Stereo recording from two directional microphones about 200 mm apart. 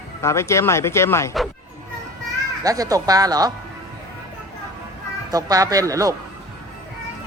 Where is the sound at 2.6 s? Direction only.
15° right (ahead or behind).